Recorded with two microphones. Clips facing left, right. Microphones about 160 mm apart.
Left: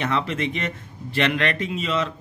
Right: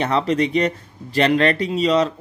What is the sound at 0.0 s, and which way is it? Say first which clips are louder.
Speech: right 6 dB; 35° right (ahead or behind).